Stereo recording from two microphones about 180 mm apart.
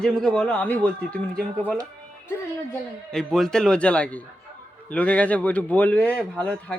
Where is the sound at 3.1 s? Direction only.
5° left (ahead or behind).